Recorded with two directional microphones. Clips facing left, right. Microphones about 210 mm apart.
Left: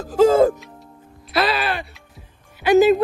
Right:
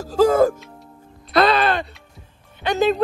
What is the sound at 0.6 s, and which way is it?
Music, centre (ahead or behind).